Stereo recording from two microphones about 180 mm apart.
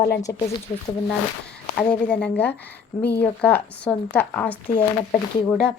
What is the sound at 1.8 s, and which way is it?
Speech, 5° left (ahead or behind).